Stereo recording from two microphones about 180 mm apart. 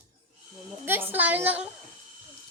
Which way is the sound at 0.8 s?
10° right (ahead or behind).